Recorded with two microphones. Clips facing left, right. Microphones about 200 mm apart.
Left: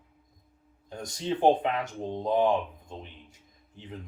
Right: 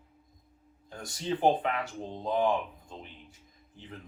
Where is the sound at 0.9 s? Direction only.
20° left (ahead or behind).